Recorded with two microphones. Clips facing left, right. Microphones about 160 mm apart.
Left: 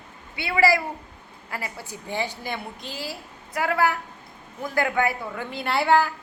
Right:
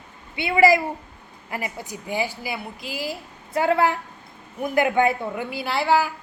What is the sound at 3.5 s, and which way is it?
A woman's voice, 25° right (ahead or behind).